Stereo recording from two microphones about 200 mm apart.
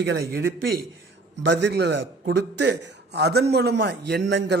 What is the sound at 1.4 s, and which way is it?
A man's voice, 60° right (ahead or behind).